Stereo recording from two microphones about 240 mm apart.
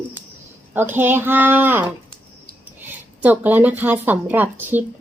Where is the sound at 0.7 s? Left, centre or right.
Centre.